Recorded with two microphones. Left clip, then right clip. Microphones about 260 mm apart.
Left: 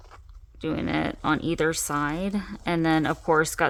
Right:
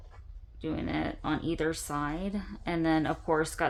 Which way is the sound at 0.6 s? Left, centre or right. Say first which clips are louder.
Left 6 dB; left.